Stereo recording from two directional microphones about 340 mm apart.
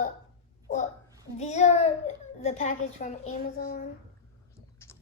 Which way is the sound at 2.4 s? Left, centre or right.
Centre.